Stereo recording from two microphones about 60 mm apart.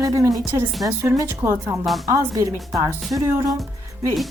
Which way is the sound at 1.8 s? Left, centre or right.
Centre.